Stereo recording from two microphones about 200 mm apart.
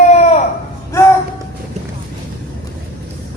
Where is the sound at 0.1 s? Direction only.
35° left (ahead or behind).